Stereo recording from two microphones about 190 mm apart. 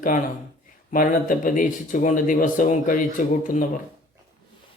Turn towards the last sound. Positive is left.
turn(degrees=40)  # may be behind; listen again after turning